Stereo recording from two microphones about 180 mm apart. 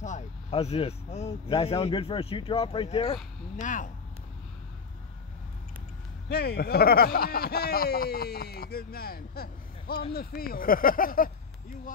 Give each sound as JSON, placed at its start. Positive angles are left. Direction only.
{"t": 0.0, "sound": "speech", "side_deg": 40}
{"t": 3.6, "sound": "speech", "side_deg": 45}
{"t": 6.2, "sound": "speech", "side_deg": 65}